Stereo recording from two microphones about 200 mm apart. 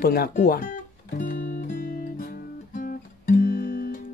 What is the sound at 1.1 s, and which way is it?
Music, 40° left (ahead or behind).